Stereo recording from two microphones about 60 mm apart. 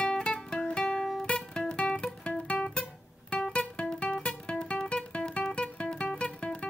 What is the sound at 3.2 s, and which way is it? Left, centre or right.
Guitar, centre.